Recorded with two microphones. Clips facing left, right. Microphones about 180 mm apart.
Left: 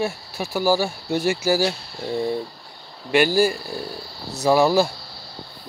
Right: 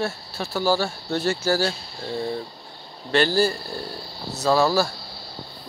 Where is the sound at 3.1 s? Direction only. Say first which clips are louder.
Left 2 dB; 10° left (ahead or behind).